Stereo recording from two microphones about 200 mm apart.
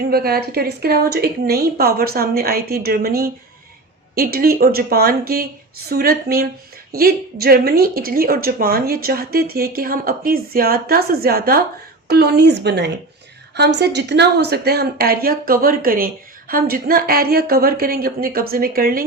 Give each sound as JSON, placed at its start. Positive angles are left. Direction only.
{"t": 0.0, "sound": "a woman's voice", "side_deg": -50}